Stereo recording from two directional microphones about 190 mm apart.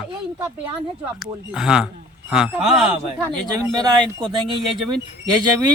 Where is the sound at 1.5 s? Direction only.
5° right (ahead or behind).